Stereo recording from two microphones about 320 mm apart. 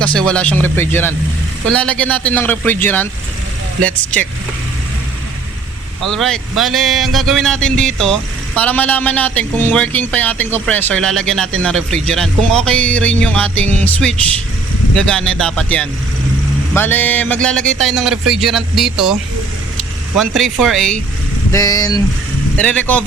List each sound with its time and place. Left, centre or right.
0.0 s speech: centre
6.1 s speech: centre
20.1 s speech: centre